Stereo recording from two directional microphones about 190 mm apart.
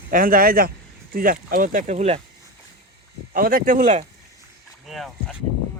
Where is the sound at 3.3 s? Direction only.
50° right (ahead or behind).